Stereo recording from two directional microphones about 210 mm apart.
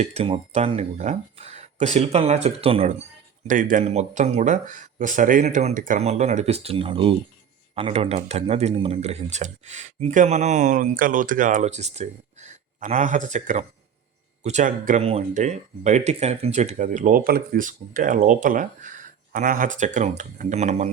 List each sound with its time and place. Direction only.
0.0 s speech: 30° right (ahead or behind)